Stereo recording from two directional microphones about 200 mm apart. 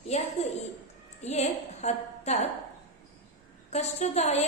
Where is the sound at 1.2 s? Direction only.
35° left (ahead or behind).